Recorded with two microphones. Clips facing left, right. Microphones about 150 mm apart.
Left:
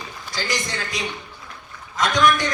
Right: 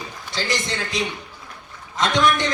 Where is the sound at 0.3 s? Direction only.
25° right (ahead or behind).